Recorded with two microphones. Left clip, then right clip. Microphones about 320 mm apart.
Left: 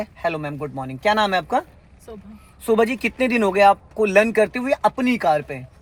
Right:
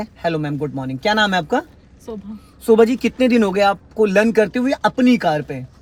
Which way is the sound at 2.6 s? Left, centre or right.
Left.